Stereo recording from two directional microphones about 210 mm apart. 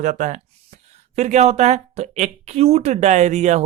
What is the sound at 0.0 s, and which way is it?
A woman's voice, 35° right (ahead or behind).